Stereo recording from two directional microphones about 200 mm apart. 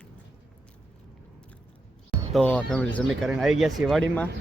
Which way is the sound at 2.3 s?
5° left (ahead or behind).